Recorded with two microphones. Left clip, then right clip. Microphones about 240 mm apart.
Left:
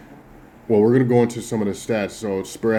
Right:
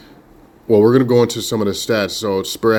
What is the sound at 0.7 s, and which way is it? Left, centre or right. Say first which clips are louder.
Speech: right 4 dB; right.